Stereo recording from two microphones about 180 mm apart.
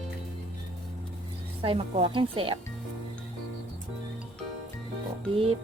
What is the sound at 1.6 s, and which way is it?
Speech, 30° right (ahead or behind).